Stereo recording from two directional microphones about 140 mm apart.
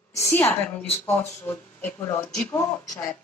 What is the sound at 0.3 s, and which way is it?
Speech, 15° left (ahead or behind).